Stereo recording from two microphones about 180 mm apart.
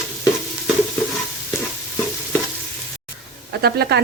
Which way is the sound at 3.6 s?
60° right (ahead or behind).